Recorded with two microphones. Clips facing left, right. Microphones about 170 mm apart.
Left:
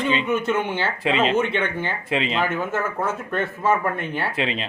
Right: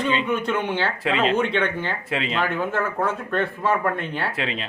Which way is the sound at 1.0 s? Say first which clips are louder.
Left 2 dB; 20° left (ahead or behind).